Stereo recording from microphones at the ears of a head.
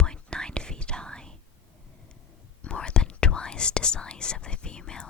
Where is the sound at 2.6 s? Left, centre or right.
Left.